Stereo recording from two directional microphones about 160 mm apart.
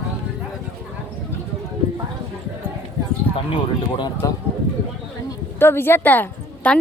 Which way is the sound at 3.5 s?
30° left (ahead or behind).